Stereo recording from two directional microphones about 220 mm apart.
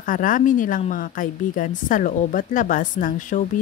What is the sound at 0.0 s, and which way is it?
Speech, 40° left (ahead or behind).